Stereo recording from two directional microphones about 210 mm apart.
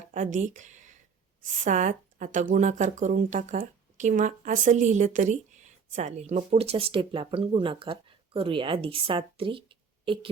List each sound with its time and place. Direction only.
0.1 s speech: 35° right (ahead or behind)